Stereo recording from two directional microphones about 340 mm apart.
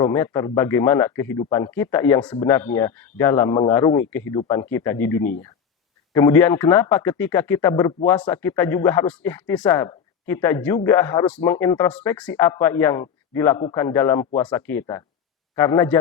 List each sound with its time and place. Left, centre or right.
0.0 s a man's voice: centre